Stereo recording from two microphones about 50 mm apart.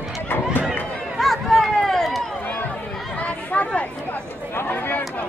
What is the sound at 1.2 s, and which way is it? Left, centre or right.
Run, centre.